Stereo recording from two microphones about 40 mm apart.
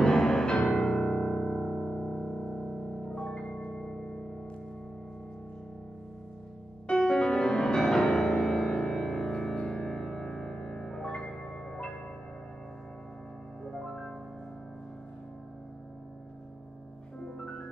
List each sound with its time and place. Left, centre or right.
0.0 s music: left
6.9 s music: left
9.0 s music: centre
9.6 s music: left
9.8 s music: centre
13.7 s music: centre
17.2 s music: left